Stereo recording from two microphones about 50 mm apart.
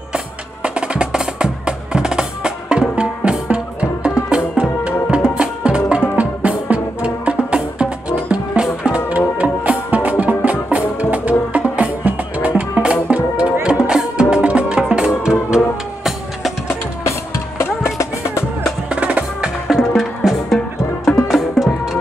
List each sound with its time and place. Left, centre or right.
0.1 s music: centre
17.6 s music: left
18.9 s percussion: right
19.7 s music: centre
21.6 s music: centre